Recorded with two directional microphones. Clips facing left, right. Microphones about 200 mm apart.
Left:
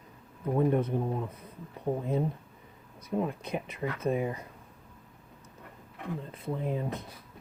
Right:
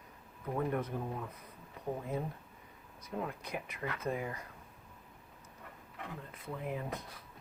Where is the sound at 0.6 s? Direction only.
25° left (ahead or behind).